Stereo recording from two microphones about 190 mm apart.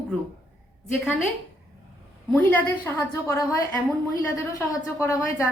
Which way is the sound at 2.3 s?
10° left (ahead or behind).